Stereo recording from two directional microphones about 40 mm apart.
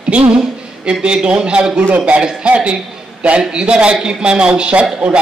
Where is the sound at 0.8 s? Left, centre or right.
Right.